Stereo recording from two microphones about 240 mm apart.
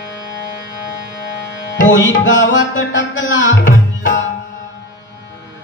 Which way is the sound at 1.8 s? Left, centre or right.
Left.